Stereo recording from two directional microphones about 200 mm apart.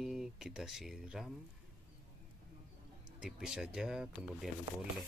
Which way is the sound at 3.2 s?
Centre (ahead or behind).